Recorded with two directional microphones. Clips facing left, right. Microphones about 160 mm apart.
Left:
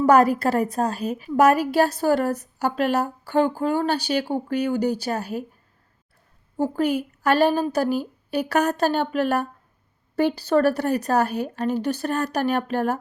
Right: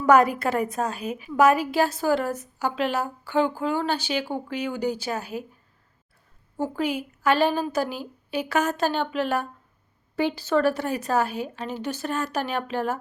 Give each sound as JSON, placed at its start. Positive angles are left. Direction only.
{"t": 0.0, "sound": "a woman's voice", "side_deg": 35}
{"t": 6.6, "sound": "a woman's voice", "side_deg": 40}